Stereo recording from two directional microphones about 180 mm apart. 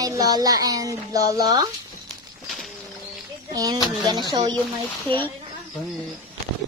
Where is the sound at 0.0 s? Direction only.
20° right (ahead or behind).